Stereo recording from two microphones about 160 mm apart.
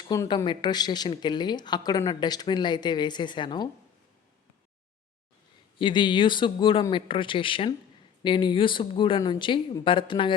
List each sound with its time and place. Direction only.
0.1 s speech: 25° left (ahead or behind)
5.8 s speech: 30° left (ahead or behind)